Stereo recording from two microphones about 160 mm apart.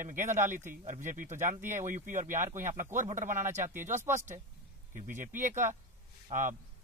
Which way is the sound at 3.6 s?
15° right (ahead or behind).